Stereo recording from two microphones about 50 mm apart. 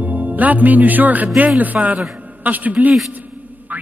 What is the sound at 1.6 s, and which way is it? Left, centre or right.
A man's voice, right.